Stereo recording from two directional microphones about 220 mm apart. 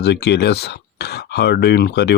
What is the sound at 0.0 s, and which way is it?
Speech, 50° left (ahead or behind).